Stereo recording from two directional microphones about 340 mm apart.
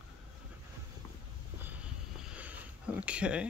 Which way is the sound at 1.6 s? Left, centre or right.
Centre.